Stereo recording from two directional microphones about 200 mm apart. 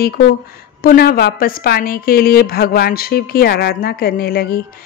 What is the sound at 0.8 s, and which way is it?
A woman's voice, 50° left (ahead or behind).